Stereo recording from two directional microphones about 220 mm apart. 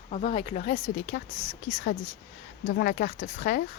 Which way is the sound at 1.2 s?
45° left (ahead or behind).